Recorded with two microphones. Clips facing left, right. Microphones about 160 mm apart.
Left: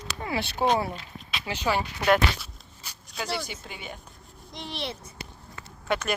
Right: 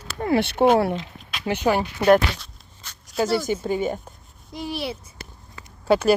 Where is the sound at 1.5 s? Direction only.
50° right (ahead or behind).